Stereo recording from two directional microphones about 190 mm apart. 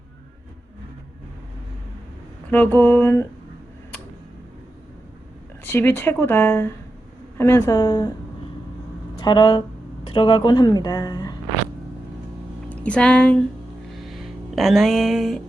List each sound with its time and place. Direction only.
2.5 s speech: 10° left (ahead or behind)
5.6 s speech: 10° left (ahead or behind)
9.1 s speech: 25° left (ahead or behind)
12.6 s speech: 5° left (ahead or behind)
14.0 s a sound: centre (ahead or behind)